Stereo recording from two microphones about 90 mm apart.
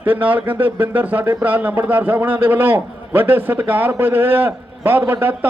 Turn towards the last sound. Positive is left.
turn(degrees=-25)  # may be behind; listen again after turning